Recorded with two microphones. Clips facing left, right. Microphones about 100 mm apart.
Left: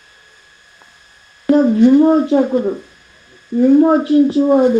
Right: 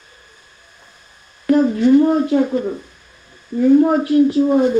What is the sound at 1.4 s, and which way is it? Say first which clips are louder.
Speech: left 3 dB; 25° left (ahead or behind).